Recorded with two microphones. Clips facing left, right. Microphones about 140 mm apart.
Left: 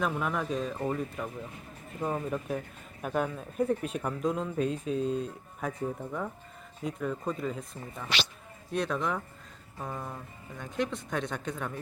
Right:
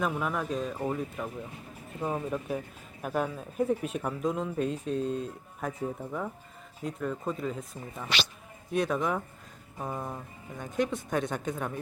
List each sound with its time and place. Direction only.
0.0 s speech: centre (ahead or behind)
9.7 s music: 20° right (ahead or behind)
10.6 s speech: centre (ahead or behind)